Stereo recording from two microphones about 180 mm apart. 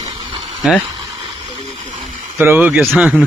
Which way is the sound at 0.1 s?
25° right (ahead or behind).